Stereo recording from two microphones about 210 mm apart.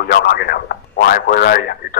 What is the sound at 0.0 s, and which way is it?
Speech, 45° left (ahead or behind).